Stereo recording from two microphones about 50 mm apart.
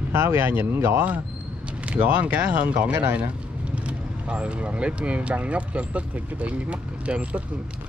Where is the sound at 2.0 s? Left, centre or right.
Right.